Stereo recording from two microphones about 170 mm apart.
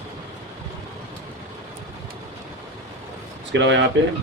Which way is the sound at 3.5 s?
90° right.